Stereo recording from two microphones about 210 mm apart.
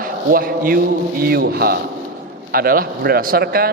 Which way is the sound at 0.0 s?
45° right (ahead or behind).